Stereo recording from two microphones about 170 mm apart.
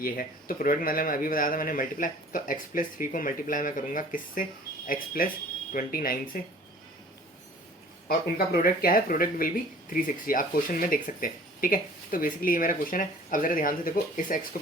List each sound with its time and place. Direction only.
0.0 s speech: 55° left (ahead or behind)
8.0 s speech: 60° left (ahead or behind)